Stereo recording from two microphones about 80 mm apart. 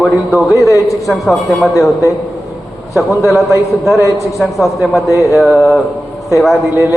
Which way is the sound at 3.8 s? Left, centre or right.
Left.